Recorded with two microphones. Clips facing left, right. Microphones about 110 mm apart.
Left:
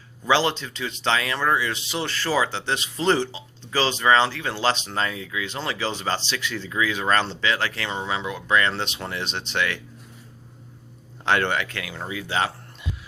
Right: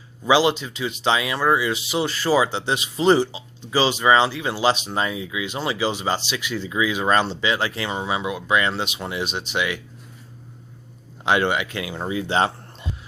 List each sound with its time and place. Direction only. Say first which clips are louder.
0.3 s speech: right 3 dB; 10° right (ahead or behind)
11.3 s speech: right 2 dB; 15° right (ahead or behind); by 12.9 s 30° right (ahead or behind)